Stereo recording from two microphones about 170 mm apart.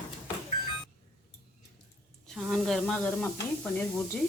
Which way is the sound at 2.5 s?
Centre (ahead or behind).